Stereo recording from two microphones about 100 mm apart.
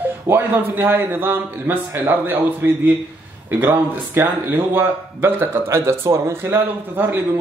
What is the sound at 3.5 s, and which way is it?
Speech, 20° right (ahead or behind).